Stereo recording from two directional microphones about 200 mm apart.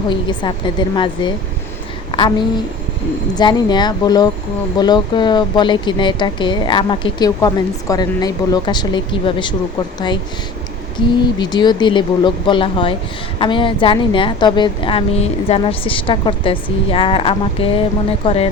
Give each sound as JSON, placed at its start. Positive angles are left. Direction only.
{"t": 0.1, "sound": "speech", "side_deg": 25}
{"t": 3.3, "sound": "speech", "side_deg": 20}
{"t": 10.9, "sound": "speech", "side_deg": 20}